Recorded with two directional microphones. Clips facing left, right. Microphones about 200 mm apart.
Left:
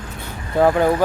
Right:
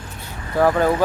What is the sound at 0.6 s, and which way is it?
Speech, 15° left (ahead or behind).